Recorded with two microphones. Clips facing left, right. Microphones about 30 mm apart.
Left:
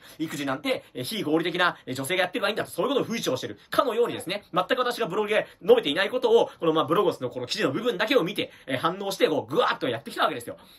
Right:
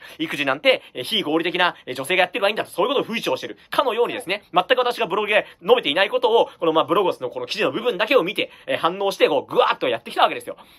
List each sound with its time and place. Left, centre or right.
0.2 s speech: right
1.9 s speech: right
2.1 s speech: right
2.6 s speech: right
4.0 s speech: right
4.3 s speech: right
5.3 s speech: right
6.9 s speech: right
8.7 s speech: right
9.8 s speech: right